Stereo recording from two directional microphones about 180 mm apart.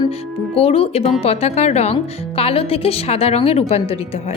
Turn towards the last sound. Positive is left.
turn(degrees=35)  # may be behind; listen again after turning